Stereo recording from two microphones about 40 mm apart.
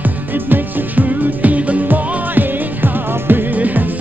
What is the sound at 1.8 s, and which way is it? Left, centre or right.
Music, right.